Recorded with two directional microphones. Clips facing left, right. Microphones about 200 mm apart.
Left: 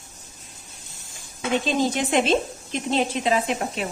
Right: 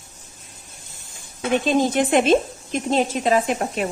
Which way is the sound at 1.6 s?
55° right (ahead or behind).